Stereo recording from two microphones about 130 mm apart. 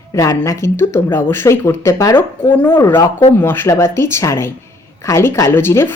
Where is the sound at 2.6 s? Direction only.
15° left (ahead or behind).